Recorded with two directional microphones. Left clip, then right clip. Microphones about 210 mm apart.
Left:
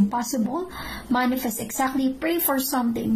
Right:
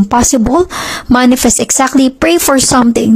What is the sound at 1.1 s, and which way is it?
Speech, 50° right (ahead or behind).